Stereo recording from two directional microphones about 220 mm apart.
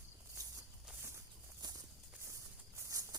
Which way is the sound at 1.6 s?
20° right (ahead or behind).